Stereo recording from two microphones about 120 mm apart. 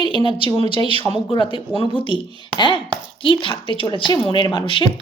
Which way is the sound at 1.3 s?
40° left (ahead or behind).